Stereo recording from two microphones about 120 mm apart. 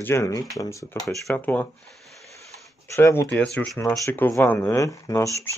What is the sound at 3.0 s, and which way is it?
Speech, 20° left (ahead or behind).